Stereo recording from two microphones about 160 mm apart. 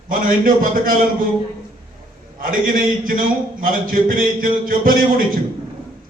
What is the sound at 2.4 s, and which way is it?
A man's voice, 60° right (ahead or behind).